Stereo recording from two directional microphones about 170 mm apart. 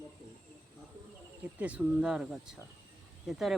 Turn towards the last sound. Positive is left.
turn(degrees=0)  # may be behind; listen again after turning